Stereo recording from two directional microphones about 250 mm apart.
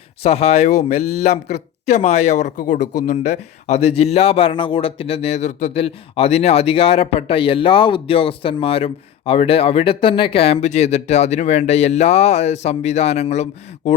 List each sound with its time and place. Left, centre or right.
0.2 s speech: left